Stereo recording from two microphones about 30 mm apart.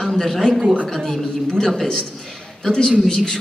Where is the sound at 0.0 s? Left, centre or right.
Centre.